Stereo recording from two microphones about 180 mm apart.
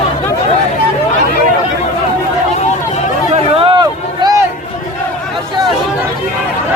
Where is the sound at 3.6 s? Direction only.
25° right (ahead or behind).